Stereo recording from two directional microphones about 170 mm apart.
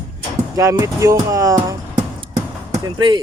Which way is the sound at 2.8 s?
25° right (ahead or behind).